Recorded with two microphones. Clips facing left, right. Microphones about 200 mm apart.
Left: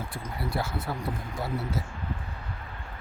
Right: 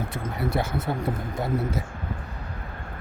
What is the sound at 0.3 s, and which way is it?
Speech, 20° right (ahead or behind).